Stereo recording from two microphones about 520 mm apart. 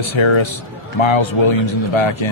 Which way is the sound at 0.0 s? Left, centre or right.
Left.